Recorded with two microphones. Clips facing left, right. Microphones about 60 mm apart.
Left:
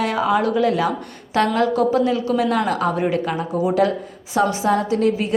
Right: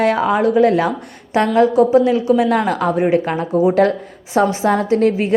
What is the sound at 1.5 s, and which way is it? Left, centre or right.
A woman's voice, right.